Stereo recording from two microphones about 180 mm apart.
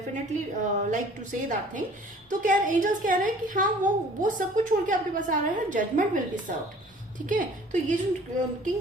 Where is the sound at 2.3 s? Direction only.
50° right (ahead or behind).